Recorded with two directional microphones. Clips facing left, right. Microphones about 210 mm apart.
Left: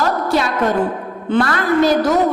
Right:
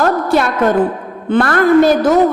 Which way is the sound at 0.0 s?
55° right (ahead or behind).